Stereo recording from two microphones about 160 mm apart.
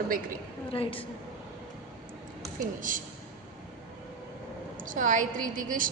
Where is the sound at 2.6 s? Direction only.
55° right (ahead or behind).